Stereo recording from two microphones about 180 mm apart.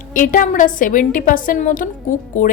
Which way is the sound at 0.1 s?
50° left (ahead or behind).